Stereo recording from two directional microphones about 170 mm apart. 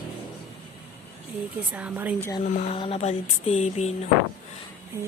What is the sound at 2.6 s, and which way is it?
Music, 35° left (ahead or behind).